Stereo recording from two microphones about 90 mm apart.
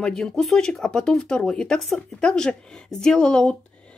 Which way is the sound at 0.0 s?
5° left (ahead or behind).